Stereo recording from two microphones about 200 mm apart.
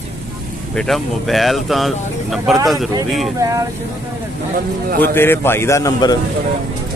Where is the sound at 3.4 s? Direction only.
15° right (ahead or behind).